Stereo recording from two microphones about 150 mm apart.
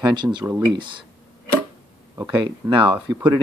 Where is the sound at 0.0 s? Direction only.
30° right (ahead or behind).